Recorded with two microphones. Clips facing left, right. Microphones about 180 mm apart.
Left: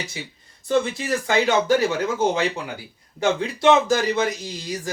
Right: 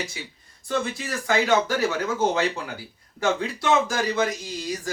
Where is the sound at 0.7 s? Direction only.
20° left (ahead or behind).